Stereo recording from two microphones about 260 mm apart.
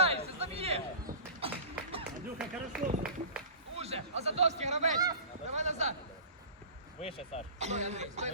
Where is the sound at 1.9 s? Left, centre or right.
Right.